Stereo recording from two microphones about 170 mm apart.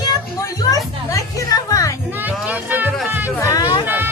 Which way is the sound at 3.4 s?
20° left (ahead or behind).